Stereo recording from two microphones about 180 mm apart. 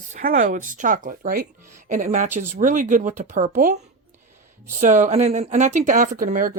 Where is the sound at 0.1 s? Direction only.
50° right (ahead or behind).